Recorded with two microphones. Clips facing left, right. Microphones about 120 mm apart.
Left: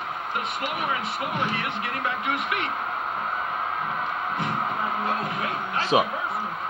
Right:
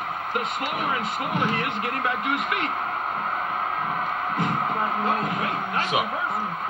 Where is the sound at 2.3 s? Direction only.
45° right (ahead or behind).